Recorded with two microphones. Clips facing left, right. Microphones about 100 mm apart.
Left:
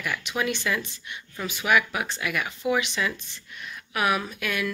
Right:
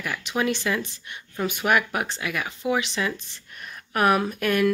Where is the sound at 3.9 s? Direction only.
45° right (ahead or behind).